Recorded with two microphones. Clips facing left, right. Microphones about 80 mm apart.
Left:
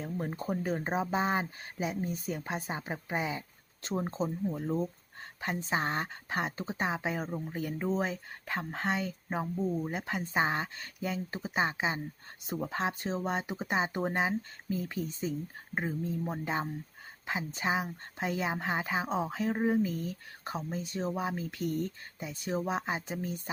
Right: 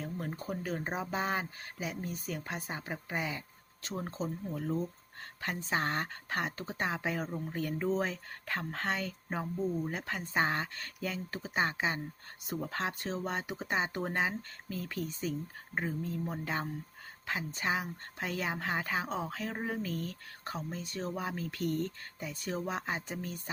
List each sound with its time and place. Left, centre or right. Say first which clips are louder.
0.0 s speech: left 3 dB; centre